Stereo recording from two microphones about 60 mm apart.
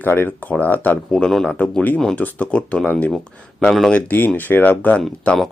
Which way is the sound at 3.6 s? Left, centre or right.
Centre.